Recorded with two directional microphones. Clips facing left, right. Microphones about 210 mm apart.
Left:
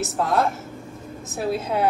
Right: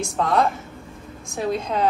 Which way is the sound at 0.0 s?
5° left (ahead or behind).